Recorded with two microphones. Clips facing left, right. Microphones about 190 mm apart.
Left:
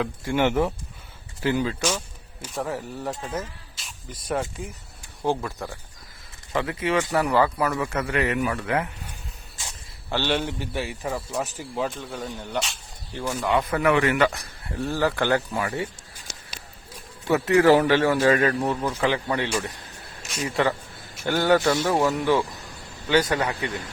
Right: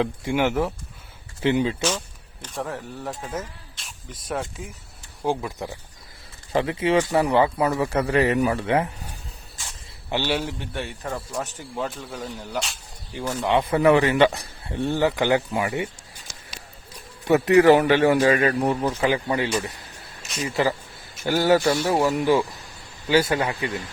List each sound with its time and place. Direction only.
0.3 s a man's voice: 5° right (ahead or behind)
1.4 s speech: 20° right (ahead or behind)
2.4 s a man's voice: centre (ahead or behind)
5.2 s a man's voice: 10° right (ahead or behind)
6.5 s speech: 30° right (ahead or behind)
10.1 s a man's voice: 10° right (ahead or behind)
13.4 s speech: 30° right (ahead or behind)
14.8 s speech: 20° right (ahead or behind)
17.2 s a man's voice: 15° right (ahead or behind)